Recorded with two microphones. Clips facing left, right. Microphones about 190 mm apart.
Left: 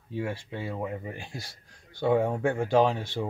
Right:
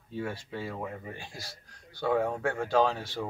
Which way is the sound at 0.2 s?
25° left (ahead or behind).